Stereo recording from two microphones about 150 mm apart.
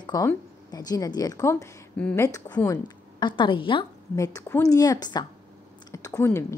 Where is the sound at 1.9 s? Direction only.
10° left (ahead or behind); by 3.9 s 35° left (ahead or behind).